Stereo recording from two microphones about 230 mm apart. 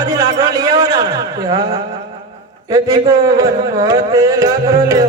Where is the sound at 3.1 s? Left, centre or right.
Centre.